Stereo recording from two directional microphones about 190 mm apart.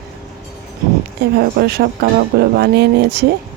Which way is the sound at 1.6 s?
60° right (ahead or behind).